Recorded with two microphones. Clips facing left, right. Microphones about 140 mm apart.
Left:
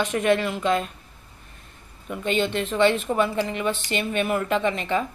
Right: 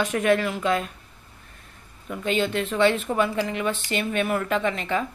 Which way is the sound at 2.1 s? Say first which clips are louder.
Even; 5° right (ahead or behind).